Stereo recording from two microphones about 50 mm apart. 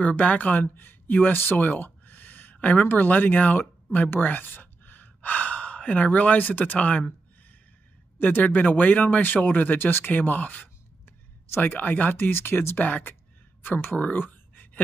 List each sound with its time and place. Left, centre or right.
0.0 s speech: left
1.3 s a sound: left
2.5 s speech: left
8.2 s speech: left
13.6 s speech: left
13.9 s a sound: left